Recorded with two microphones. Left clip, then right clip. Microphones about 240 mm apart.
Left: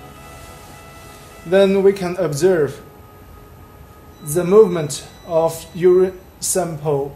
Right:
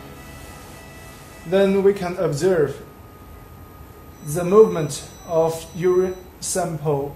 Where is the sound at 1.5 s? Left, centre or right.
Left.